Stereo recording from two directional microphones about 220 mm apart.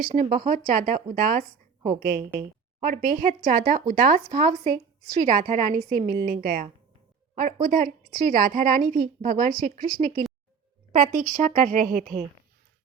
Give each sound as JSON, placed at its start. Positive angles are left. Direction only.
{"t": 0.0, "sound": "a woman's voice", "side_deg": -30}